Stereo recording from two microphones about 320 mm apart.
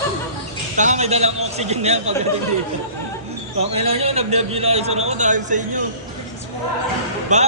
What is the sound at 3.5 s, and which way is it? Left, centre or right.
A man's voice, centre.